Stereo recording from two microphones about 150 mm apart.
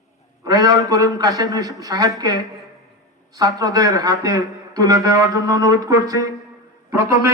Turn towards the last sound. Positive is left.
turn(degrees=-20)  # may be behind; listen again after turning